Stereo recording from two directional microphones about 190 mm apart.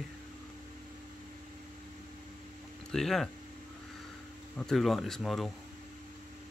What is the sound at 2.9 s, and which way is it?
Speech, centre (ahead or behind).